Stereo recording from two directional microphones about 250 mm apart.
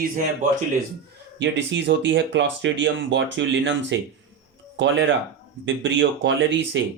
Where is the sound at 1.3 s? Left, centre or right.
Right.